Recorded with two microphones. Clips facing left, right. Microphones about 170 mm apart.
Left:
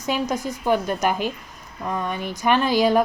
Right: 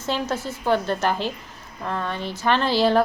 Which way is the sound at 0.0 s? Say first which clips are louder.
Left 2 dB; 15° left (ahead or behind).